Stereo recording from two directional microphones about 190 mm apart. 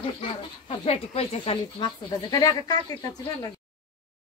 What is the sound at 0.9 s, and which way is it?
Speech, 30° left (ahead or behind).